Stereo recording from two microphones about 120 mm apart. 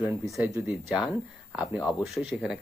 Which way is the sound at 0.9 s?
10° right (ahead or behind).